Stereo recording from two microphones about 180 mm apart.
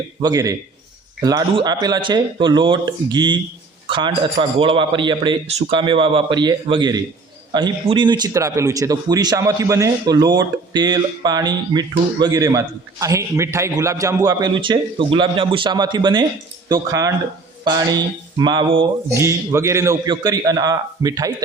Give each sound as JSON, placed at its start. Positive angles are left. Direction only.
{"t": 0.2, "sound": "a man's voice", "side_deg": -20}
{"t": 19.1, "sound": "a man's voice", "side_deg": -15}